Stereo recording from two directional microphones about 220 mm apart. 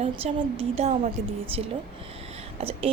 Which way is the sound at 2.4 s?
25° right (ahead or behind).